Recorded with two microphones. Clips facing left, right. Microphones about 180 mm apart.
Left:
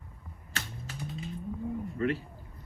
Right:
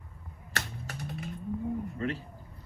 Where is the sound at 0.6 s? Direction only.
65° right (ahead or behind).